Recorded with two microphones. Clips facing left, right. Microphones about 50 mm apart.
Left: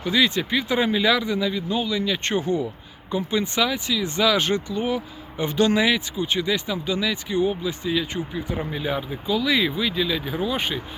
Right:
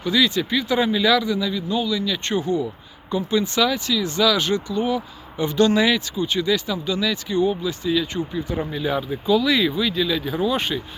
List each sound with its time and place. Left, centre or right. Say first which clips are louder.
0.0 s speech: right 1 dB; left